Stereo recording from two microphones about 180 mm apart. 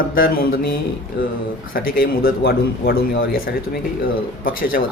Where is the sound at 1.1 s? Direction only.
75° left (ahead or behind).